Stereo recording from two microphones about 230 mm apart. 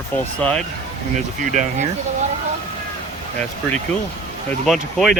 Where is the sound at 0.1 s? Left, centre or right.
Centre.